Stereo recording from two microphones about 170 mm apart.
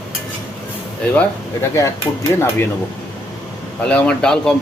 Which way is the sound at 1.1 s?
15° left (ahead or behind).